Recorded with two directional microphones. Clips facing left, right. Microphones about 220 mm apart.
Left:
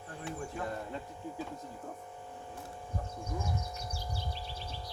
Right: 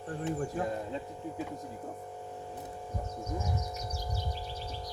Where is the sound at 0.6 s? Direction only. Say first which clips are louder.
Right 4 dB; 20° right (ahead or behind).